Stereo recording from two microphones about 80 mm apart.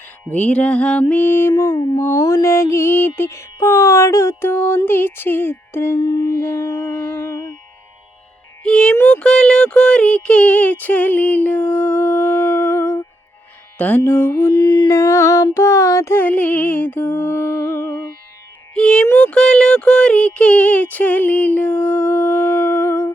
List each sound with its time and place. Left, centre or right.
0.3 s music: centre
4.9 s speech: left
6.0 s music: left
6.4 s music: left
8.6 s music: centre
9.0 s speech: centre
13.7 s music: centre
14.5 s mantra: left
14.9 s music: left
15.5 s child singing: left
16.1 s speech: left
17.2 s music: left
18.7 s speech: centre